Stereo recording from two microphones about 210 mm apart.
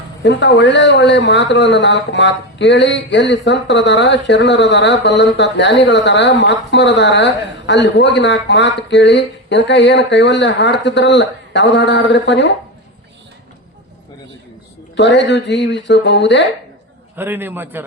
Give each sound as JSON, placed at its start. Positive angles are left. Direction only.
{"t": 0.2, "sound": "a woman's voice", "side_deg": 55}
{"t": 14.9, "sound": "a woman's voice", "side_deg": 55}
{"t": 17.2, "sound": "a man's voice", "side_deg": -10}